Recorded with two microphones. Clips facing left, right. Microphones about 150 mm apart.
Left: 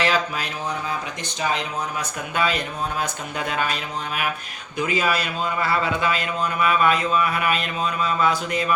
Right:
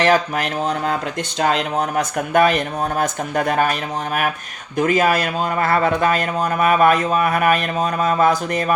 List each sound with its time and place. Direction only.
0.0 s a man's voice: 50° right (ahead or behind)
0.6 s speech: 90° right
2.1 s a man's voice: 50° right (ahead or behind)